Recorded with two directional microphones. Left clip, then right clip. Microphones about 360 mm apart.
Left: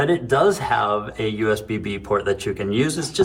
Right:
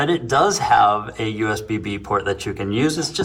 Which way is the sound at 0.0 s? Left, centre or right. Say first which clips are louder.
Even; right.